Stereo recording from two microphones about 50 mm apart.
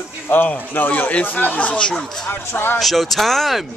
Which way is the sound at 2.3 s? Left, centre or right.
Left.